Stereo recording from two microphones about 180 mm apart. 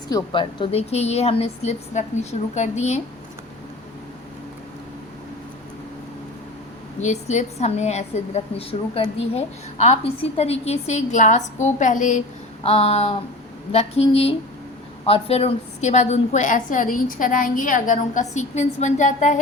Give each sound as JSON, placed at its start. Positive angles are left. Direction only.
{"t": 0.1, "sound": "a woman's voice", "side_deg": 30}
{"t": 7.0, "sound": "a woman's voice", "side_deg": 40}
{"t": 12.6, "sound": "a woman's voice", "side_deg": 35}